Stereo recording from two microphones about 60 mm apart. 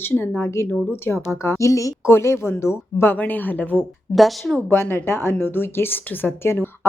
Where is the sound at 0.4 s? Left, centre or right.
Left.